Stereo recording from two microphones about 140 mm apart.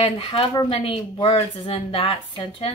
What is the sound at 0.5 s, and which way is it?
Speech, 30° left (ahead or behind).